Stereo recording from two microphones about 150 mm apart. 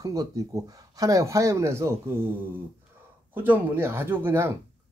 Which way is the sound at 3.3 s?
10° right (ahead or behind).